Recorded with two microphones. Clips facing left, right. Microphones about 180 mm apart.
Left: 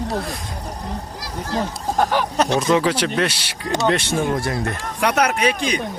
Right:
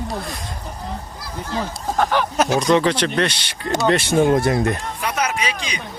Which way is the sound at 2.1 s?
Centre (ahead or behind).